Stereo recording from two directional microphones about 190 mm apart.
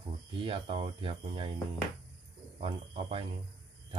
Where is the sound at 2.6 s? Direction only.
30° right (ahead or behind).